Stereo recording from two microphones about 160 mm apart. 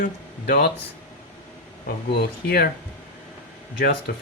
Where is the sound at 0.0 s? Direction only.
80° left.